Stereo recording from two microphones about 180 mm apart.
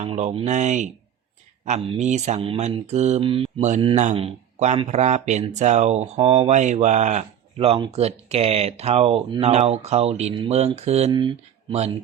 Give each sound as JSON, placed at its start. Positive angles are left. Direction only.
{"t": 0.0, "sound": "speech", "side_deg": -35}
{"t": 11.1, "sound": "speech", "side_deg": -25}